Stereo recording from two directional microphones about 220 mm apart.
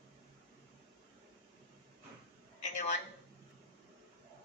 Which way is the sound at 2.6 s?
35° left (ahead or behind).